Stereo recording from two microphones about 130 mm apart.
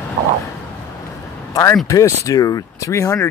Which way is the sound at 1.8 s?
25° left (ahead or behind).